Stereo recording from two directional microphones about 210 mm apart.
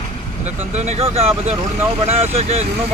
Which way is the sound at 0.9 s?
30° right (ahead or behind).